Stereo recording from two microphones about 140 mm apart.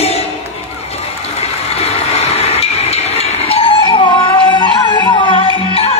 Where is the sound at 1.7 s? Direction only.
45° left (ahead or behind).